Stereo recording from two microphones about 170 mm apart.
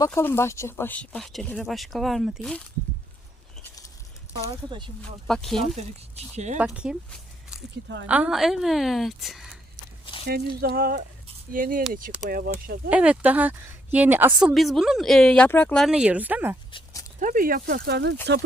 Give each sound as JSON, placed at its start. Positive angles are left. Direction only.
{"t": 0.0, "sound": "speech", "side_deg": 15}
{"t": 5.3, "sound": "speech", "side_deg": 0}
{"t": 6.3, "sound": "speech", "side_deg": -45}
{"t": 6.9, "sound": "speech", "side_deg": -5}
{"t": 8.0, "sound": "speech", "side_deg": -10}
{"t": 10.2, "sound": "speech", "side_deg": -65}
{"t": 12.9, "sound": "a woman's voice", "side_deg": -10}
{"t": 16.7, "sound": "dog", "side_deg": 20}
{"t": 17.2, "sound": "speech", "side_deg": -50}